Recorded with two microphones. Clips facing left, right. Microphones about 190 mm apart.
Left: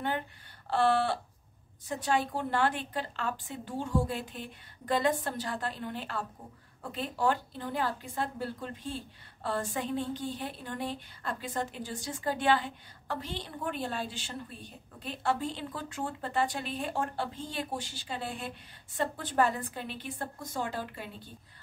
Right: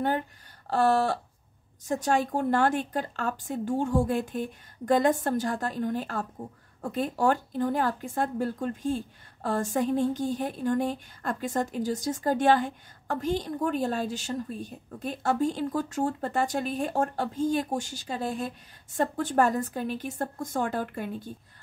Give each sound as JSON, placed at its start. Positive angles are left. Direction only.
{"t": 0.7, "sound": "a woman's voice", "side_deg": -45}